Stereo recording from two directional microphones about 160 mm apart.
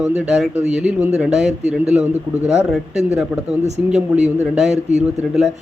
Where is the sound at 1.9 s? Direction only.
45° right (ahead or behind).